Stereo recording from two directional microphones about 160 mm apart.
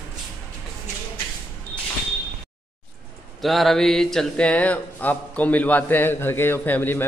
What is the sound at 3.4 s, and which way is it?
Speech, centre (ahead or behind).